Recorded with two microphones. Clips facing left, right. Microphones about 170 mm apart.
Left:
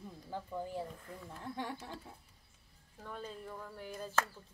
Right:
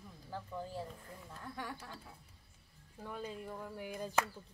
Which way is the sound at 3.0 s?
10° right (ahead or behind).